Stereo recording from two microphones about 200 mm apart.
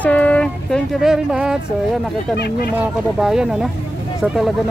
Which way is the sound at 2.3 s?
55° left (ahead or behind).